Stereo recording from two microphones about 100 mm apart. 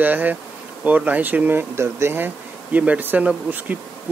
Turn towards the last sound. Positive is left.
turn(degrees=-15)  # may be behind; listen again after turning